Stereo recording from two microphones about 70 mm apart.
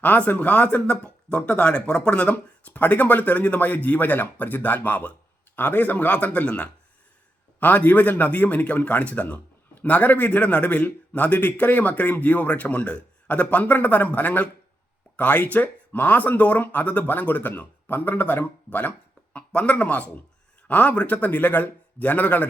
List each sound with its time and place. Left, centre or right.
0.0 s speech: left